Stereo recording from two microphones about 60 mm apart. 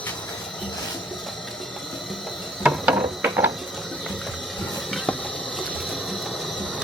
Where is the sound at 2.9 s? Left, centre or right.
Right.